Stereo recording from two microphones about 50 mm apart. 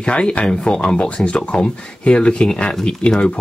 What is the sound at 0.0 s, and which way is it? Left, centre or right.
Speech, left.